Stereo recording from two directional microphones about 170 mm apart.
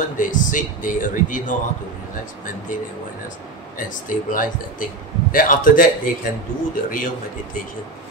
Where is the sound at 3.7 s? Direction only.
50° left (ahead or behind).